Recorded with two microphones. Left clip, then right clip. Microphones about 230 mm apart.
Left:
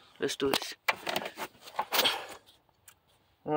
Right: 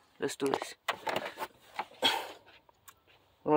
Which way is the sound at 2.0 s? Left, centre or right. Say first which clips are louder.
Even; centre.